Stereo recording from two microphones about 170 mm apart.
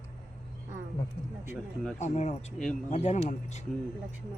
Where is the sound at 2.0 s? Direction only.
40° left (ahead or behind).